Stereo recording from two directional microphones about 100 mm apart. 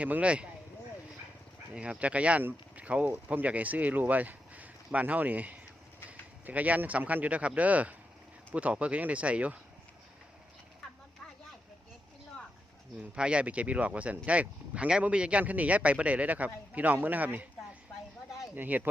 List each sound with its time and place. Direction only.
0.0 s speech: 15° right (ahead or behind)
1.7 s speech: 10° right (ahead or behind)
13.0 s speech: 10° right (ahead or behind)
18.5 s speech: 15° right (ahead or behind)